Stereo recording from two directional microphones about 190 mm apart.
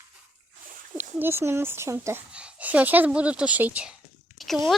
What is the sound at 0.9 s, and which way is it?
Speech, 10° right (ahead or behind).